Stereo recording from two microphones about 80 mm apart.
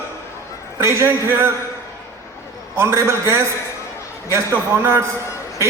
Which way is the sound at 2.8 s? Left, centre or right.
Right.